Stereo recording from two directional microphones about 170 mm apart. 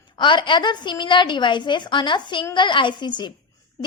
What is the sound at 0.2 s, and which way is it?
A woman's voice, 25° left (ahead or behind).